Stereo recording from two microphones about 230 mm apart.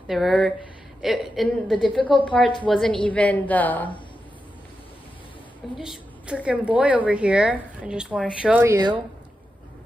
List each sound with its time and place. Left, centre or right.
0.0 s a woman's voice: centre
2.0 s a woman's voice: left
2.2 s a woman's voice: centre
5.8 s a woman's voice: centre